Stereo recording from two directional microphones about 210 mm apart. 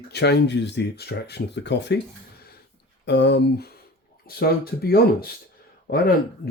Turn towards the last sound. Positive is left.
turn(degrees=45)  # may be behind; listen again after turning